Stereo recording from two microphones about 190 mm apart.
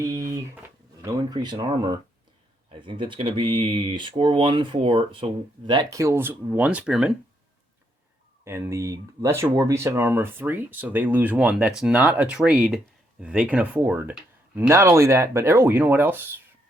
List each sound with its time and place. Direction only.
0.0 s speech: 15° right (ahead or behind)
8.4 s speech: 15° right (ahead or behind)